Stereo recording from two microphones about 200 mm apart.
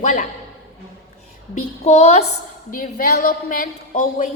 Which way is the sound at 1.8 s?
35° left (ahead or behind).